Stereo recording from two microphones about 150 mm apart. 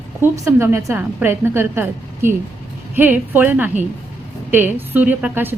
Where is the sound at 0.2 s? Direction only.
15° right (ahead or behind).